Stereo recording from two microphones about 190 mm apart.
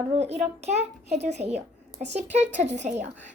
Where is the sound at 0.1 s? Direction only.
35° right (ahead or behind).